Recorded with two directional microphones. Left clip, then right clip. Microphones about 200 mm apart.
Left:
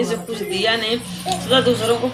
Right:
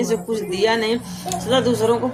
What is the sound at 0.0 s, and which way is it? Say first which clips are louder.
A woman's voice: right 1 dB; 60° right (ahead or behind).